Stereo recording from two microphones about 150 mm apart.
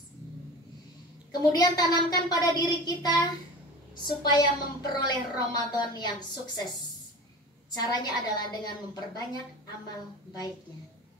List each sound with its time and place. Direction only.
1.3 s a woman's voice: 30° left (ahead or behind)
7.7 s a woman's voice: 25° left (ahead or behind)